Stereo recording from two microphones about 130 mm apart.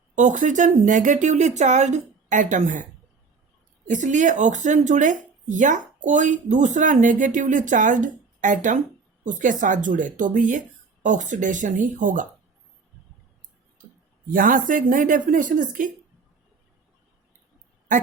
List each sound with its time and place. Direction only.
0.2 s speech: 75° right (ahead or behind)
3.8 s speech: 75° right (ahead or behind); by 12.3 s 90° right
14.3 s speech: 90° right